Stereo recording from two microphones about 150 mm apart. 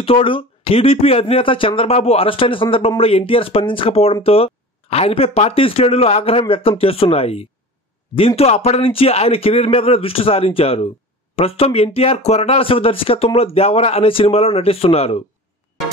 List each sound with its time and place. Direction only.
0.0 s speech: 35° left (ahead or behind)